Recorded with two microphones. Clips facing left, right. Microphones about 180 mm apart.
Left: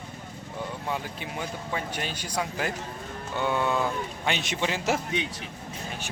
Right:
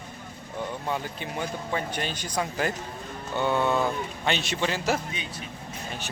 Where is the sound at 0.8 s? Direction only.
5° left (ahead or behind).